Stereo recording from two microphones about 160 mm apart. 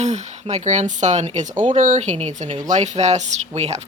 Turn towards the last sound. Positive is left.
turn(degrees=-45)  # may be behind; listen again after turning